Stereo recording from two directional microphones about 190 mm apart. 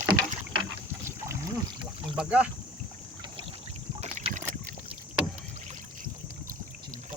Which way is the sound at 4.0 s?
35° right (ahead or behind).